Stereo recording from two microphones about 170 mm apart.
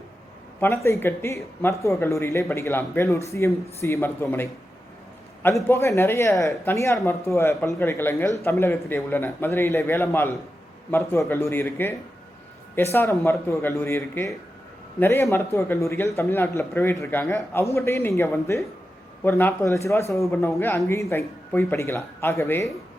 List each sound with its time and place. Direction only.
0.6 s a man's voice: 15° left (ahead or behind)